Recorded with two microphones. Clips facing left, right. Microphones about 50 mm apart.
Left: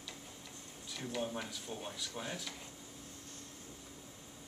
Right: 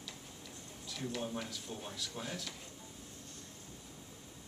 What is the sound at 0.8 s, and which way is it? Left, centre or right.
Speech, centre.